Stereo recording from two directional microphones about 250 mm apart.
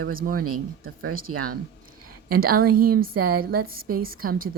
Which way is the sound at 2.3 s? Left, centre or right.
Right.